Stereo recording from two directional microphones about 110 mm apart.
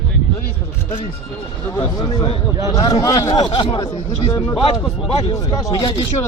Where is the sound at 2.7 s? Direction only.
35° left (ahead or behind).